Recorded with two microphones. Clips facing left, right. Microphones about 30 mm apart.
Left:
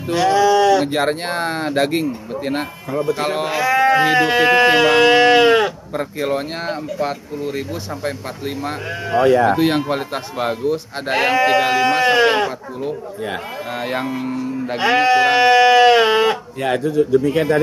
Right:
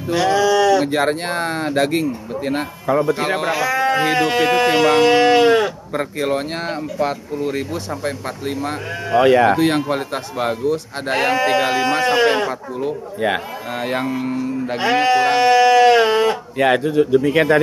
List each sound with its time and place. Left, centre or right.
0.6 s speech: centre
3.3 s speech: centre
3.6 s speech: centre
6.1 s speech: centre
9.2 s a man's voice: right
9.6 s speech: centre
14.8 s sheep: centre
16.5 s a man's voice: right